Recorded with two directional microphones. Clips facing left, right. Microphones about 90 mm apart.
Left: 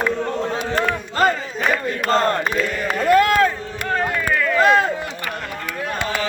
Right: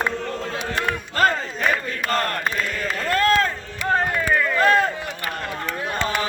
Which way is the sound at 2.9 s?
15° left (ahead or behind).